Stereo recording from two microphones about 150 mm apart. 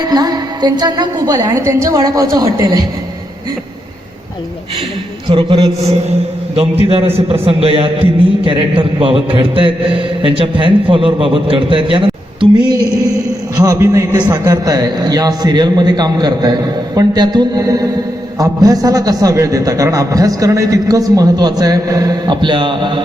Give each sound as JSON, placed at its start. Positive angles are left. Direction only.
{"t": 0.0, "sound": "a man's voice", "side_deg": -25}
{"t": 5.3, "sound": "a man's voice", "side_deg": -35}
{"t": 13.6, "sound": "a man's voice", "side_deg": -20}